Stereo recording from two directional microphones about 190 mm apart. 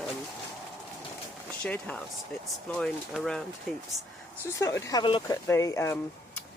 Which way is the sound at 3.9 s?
20° right (ahead or behind).